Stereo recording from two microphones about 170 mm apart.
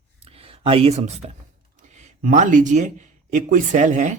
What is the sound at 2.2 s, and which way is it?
Speech, 50° right (ahead or behind).